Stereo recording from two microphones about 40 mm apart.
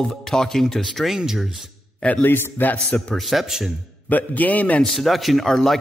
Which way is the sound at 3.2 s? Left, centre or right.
Centre.